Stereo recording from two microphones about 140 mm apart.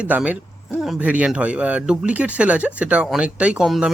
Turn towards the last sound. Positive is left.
turn(degrees=-5)  # may be behind; listen again after turning